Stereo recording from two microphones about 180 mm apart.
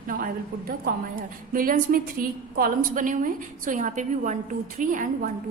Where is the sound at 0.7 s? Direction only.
50° right (ahead or behind).